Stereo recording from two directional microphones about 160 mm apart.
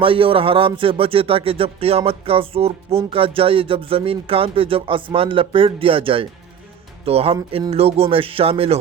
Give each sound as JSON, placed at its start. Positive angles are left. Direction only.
{"t": 0.0, "sound": "speech", "side_deg": -35}